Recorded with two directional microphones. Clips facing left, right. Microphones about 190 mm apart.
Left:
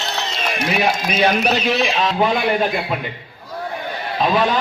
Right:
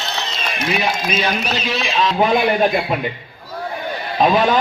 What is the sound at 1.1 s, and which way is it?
Speech, 60° left (ahead or behind).